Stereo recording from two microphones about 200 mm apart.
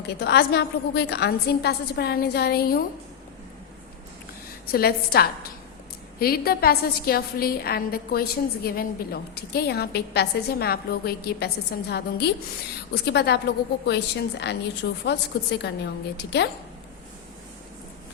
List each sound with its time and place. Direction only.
0.1 s a woman's voice: 55° left (ahead or behind)
4.7 s a woman's voice: 50° left (ahead or behind)